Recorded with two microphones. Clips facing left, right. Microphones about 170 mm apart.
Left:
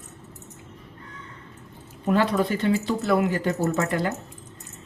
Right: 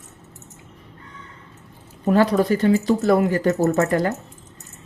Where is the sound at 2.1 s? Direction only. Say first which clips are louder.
Right 5 dB; 40° right (ahead or behind).